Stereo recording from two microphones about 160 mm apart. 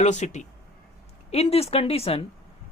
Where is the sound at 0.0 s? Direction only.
45° left (ahead or behind).